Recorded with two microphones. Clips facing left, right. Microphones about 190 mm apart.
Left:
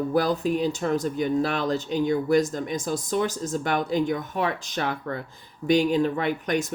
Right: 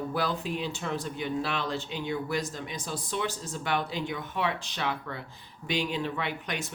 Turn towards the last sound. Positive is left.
turn(degrees=45)  # may be behind; listen again after turning